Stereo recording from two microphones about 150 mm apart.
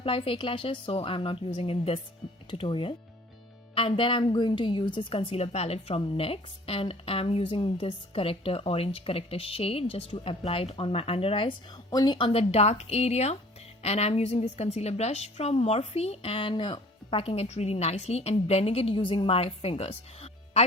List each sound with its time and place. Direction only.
0.0 s a woman's voice: 35° left (ahead or behind)